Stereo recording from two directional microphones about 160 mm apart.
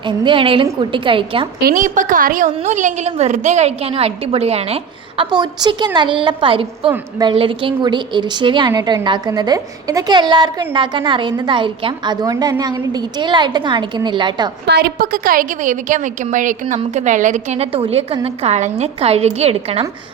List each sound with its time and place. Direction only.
0.0 s a woman's voice: 30° right (ahead or behind)
1.6 s a woman's voice: 55° right (ahead or behind); by 14.5 s 30° right (ahead or behind)
14.7 s a woman's voice: 90° right; by 19.8 s 40° right (ahead or behind)